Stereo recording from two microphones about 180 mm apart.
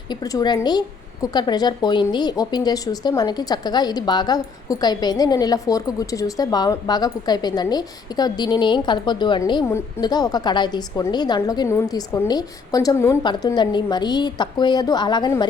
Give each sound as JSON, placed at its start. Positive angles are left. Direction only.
{"t": 0.1, "sound": "a woman's voice", "side_deg": 20}